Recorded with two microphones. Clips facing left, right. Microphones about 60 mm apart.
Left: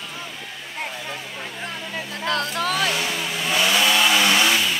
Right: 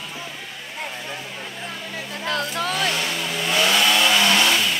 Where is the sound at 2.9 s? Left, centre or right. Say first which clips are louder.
Even; centre.